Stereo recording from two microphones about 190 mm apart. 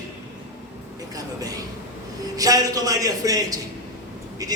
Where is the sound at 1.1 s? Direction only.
20° right (ahead or behind).